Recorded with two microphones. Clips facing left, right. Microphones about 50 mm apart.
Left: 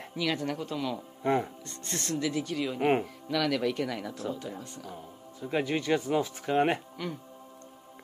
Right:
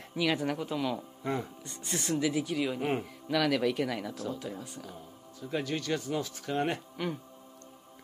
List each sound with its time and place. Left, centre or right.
0.1 s speech: centre
1.2 s speech: left
1.7 s speech: centre
5.4 s speech: left
7.0 s speech: centre